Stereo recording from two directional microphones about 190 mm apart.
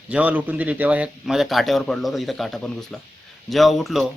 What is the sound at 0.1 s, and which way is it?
A man's voice, 5° right (ahead or behind).